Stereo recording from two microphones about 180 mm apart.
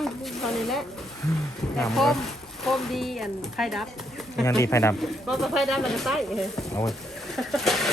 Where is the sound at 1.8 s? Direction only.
Centre (ahead or behind).